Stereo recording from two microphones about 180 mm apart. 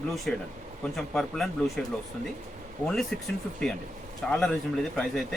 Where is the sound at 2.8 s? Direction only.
Centre (ahead or behind).